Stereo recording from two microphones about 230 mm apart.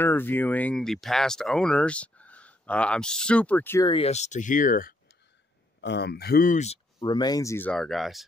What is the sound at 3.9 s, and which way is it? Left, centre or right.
Speech, left.